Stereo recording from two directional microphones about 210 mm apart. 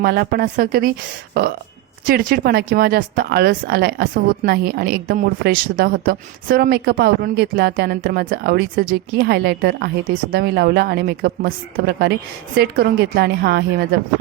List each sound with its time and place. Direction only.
0.0 s speech: 45° right (ahead or behind)